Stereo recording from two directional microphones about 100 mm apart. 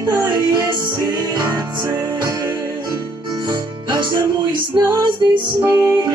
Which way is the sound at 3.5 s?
50° right (ahead or behind).